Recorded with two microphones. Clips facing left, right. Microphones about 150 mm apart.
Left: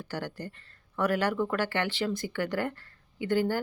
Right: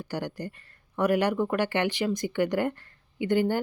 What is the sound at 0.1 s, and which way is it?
Speech, 15° right (ahead or behind).